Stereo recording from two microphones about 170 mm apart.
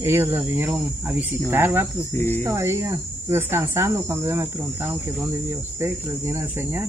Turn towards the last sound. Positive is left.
turn(degrees=-15)  # may be behind; listen again after turning